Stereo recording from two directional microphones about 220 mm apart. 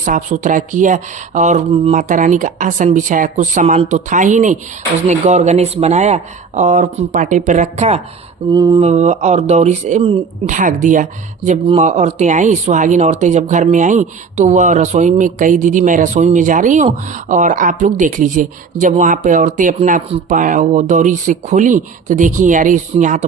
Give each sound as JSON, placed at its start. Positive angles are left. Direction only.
{"t": 0.0, "sound": "speech", "side_deg": -35}
{"t": 8.5, "sound": "mantra", "side_deg": -15}
{"t": 8.8, "sound": "speech", "side_deg": -30}